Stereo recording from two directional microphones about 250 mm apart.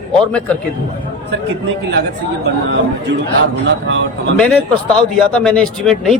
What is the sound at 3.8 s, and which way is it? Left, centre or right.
Speech, right.